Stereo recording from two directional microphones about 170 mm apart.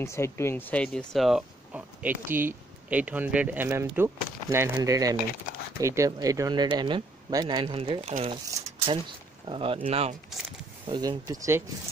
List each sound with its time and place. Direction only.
0.0 s speech: 15° left (ahead or behind); by 10.1 s 35° right (ahead or behind)
10.9 s speech: 20° right (ahead or behind)